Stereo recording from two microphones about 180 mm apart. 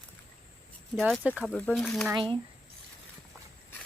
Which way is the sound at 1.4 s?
10° left (ahead or behind).